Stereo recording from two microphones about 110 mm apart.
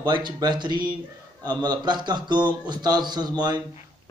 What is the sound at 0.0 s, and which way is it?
Speech, 40° right (ahead or behind).